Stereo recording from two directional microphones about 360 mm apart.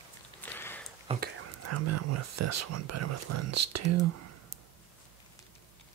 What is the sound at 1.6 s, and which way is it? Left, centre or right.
Speech, right.